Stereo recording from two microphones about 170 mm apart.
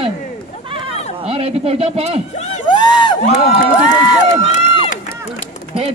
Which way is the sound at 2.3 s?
40° left (ahead or behind).